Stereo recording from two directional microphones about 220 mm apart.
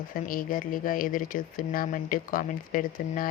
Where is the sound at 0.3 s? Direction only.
40° left (ahead or behind).